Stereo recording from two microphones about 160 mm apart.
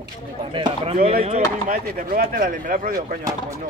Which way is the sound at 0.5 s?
30° right (ahead or behind).